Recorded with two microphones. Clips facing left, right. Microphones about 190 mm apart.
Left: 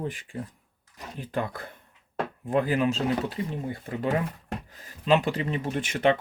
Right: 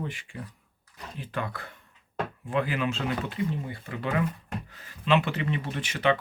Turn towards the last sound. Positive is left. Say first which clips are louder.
# left 3 dB
turn(degrees=50)  # may be behind; listen again after turning